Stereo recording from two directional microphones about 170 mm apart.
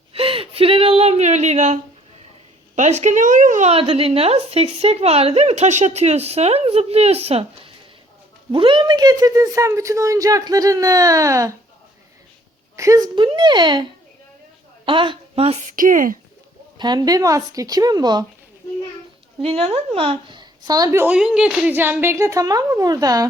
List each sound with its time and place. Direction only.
0.1 s a sound: 35° right (ahead or behind)
2.7 s a woman's voice: 45° right (ahead or behind); by 11.5 s 20° right (ahead or behind)
12.7 s speech: 20° right (ahead or behind)
14.8 s a woman's voice: 30° right (ahead or behind)
15.7 s speech: 55° right (ahead or behind)
16.7 s speech: 25° right (ahead or behind)
19.4 s speech: 35° right (ahead or behind); by 21.2 s 15° right (ahead or behind)
21.2 s a woman's voice: 5° right (ahead or behind); by 23.2 s 20° right (ahead or behind)